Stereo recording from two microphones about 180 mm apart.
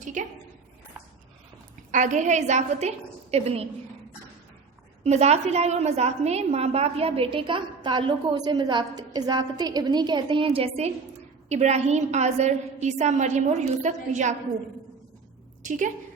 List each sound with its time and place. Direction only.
0.0 s a sound: 45° right (ahead or behind)
1.9 s a woman's voice: 45° right (ahead or behind)
5.0 s a woman's voice: 35° right (ahead or behind)
15.6 s a woman's voice: 45° right (ahead or behind)